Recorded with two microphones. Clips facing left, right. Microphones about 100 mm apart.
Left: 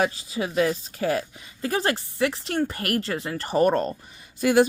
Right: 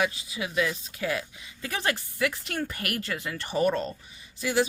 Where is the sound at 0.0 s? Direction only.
40° left (ahead or behind).